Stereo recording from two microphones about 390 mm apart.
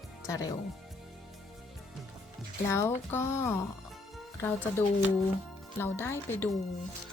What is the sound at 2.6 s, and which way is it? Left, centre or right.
Speech, centre.